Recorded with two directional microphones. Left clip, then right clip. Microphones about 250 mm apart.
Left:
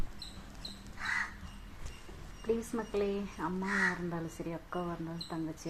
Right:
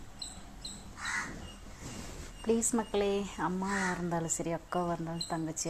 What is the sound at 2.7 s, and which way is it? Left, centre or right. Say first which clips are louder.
A woman's voice: right 3 dB; right.